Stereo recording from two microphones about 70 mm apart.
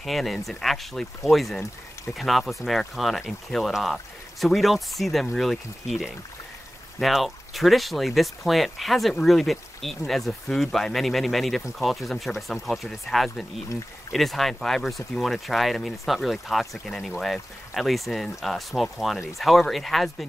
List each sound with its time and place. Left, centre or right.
0.0 s speech: centre